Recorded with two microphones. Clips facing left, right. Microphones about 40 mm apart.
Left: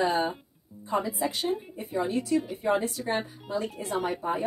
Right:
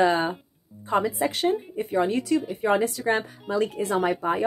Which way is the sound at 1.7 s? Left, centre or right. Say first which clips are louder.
Right 5 dB; right.